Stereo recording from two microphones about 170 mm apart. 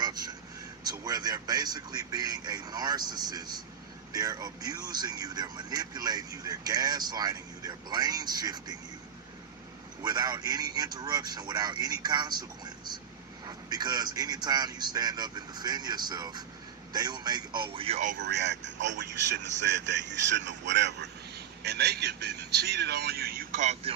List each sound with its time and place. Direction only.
0.0 s vehicle: 25° right (ahead or behind)
0.9 s speech: 20° right (ahead or behind)
10.0 s speech: 25° right (ahead or behind); by 18.2 s 45° right (ahead or behind)
18.2 s speech: 85° right; by 23.9 s 45° right (ahead or behind)